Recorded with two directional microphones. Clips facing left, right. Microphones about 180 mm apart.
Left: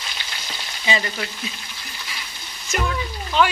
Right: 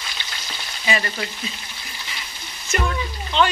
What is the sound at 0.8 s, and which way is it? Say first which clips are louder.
Frying: even; 20° left (ahead or behind).